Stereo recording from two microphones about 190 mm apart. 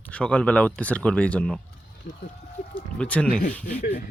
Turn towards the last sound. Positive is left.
turn(degrees=50)  # may be behind; listen again after turning